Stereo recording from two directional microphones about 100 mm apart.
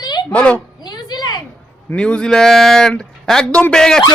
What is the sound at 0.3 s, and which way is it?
Speech, 10° left (ahead or behind).